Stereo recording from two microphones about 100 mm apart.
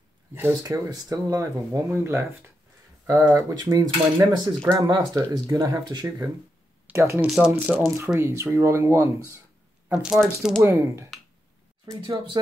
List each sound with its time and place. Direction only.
0.3 s speech: 25° right (ahead or behind)
0.7 s speech: 40° right (ahead or behind)
2.0 s speech: 25° right (ahead or behind); by 6.2 s 40° right (ahead or behind)
6.9 s speech: 25° right (ahead or behind)
7.2 s speech: 10° right (ahead or behind)
7.8 s speech: 30° right (ahead or behind)
9.8 s speech: 5° right (ahead or behind)
10.6 s speech: 25° right (ahead or behind)